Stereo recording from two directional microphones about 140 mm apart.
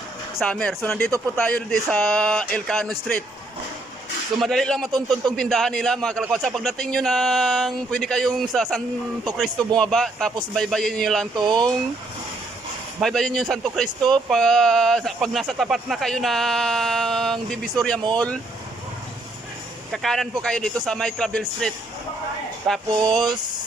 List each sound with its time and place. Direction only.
0.3 s speech: 5° left (ahead or behind)
4.4 s speech: centre (ahead or behind)
4.9 s a man's voice: 30° right (ahead or behind)
5.4 s speech: 5° left (ahead or behind)
11.3 s a man's voice: 30° right (ahead or behind)
13.0 s speech: centre (ahead or behind)
19.9 s speech: centre (ahead or behind)
22.9 s a man's voice: 30° right (ahead or behind)